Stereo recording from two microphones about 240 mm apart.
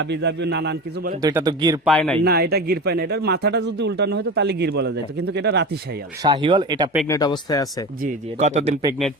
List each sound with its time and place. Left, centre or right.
0.0 s speech: right
1.2 s speech: centre
1.8 s speech: centre
2.2 s speech: right
6.2 s speech: centre
7.1 s speech: centre
8.0 s speech: right